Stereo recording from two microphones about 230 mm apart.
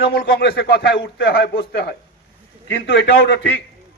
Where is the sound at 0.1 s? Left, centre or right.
Left.